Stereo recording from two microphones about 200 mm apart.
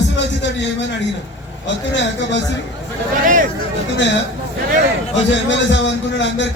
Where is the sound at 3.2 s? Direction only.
45° right (ahead or behind).